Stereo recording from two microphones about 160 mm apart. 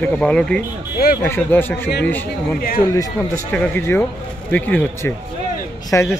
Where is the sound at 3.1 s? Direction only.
10° left (ahead or behind).